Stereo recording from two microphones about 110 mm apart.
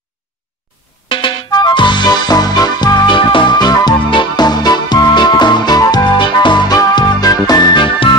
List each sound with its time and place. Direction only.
1.0 s music: 50° left (ahead or behind)